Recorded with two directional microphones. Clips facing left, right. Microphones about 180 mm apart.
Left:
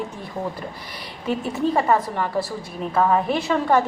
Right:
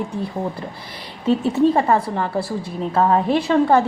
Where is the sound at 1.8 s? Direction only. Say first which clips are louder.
Right 2 dB; 25° right (ahead or behind).